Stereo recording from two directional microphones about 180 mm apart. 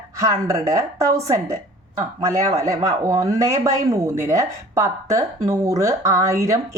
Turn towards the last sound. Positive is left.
turn(degrees=-15)  # may be behind; listen again after turning